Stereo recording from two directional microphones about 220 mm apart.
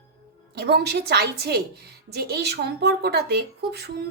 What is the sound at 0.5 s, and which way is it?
Speech, 50° right (ahead or behind).